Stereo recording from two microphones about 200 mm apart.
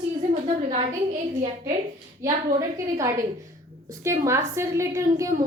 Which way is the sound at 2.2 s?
15° right (ahead or behind).